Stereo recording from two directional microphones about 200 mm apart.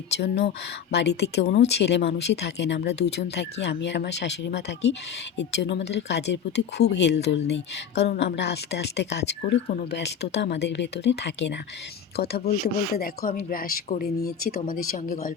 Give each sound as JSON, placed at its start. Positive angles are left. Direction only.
{"t": 0.2, "sound": "speech", "side_deg": 55}